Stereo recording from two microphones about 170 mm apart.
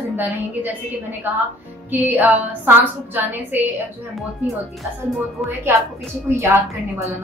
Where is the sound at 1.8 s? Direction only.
10° right (ahead or behind).